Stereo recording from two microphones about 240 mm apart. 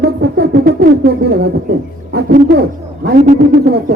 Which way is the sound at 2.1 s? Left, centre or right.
Right.